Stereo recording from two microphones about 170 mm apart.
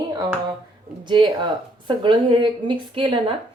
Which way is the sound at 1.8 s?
30° right (ahead or behind).